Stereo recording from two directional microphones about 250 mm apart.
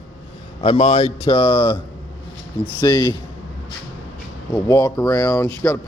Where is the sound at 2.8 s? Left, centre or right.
Centre.